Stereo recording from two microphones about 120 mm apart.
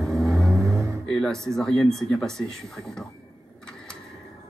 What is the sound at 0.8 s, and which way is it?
Music, 25° right (ahead or behind).